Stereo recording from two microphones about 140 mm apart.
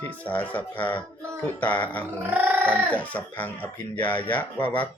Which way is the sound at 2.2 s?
15° right (ahead or behind).